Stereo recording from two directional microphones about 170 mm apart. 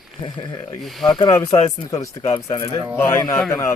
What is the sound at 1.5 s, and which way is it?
Speech, 20° left (ahead or behind).